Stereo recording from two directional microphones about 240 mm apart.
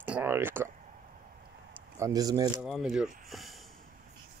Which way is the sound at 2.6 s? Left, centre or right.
Centre.